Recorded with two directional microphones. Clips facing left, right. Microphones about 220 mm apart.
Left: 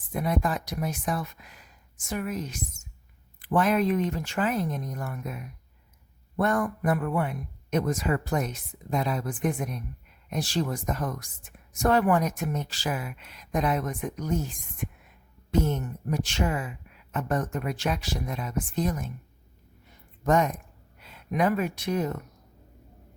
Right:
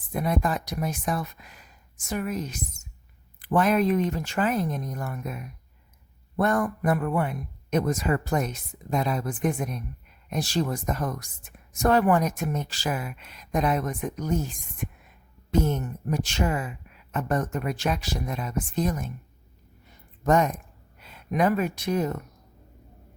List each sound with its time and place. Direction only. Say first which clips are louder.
0.1 s speech: right 1 dB; 45° right (ahead or behind)
16.2 s speech: right 1 dB; 40° right (ahead or behind)
20.2 s speech: right 2 dB; 45° right (ahead or behind)